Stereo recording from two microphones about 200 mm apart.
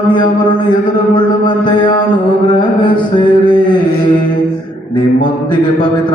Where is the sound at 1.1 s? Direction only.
25° left (ahead or behind).